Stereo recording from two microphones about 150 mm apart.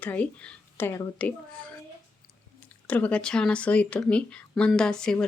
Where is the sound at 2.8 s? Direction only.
10° left (ahead or behind).